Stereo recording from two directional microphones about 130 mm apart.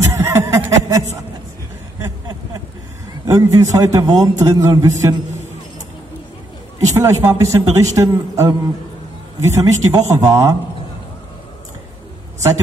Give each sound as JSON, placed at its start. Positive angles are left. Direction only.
{"t": 0.1, "sound": "a sound", "side_deg": -25}
{"t": 3.3, "sound": "a man's voice", "side_deg": -25}
{"t": 6.9, "sound": "a man's voice", "side_deg": -25}